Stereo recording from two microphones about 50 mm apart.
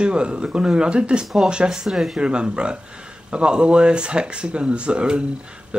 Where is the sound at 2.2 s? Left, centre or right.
Centre.